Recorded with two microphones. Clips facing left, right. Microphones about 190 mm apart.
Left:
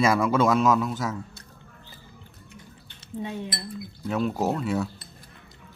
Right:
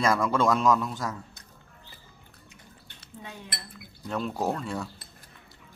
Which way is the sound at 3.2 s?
20° left (ahead or behind).